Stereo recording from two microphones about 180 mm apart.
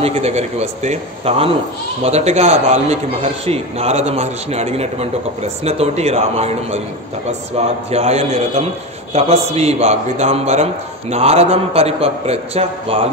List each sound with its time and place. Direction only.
0.0 s a man's voice: 35° right (ahead or behind)